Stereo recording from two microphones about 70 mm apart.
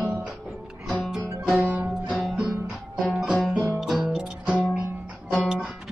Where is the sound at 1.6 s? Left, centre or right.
Right.